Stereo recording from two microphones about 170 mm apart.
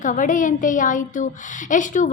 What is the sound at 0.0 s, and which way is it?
A woman's voice, 50° left (ahead or behind).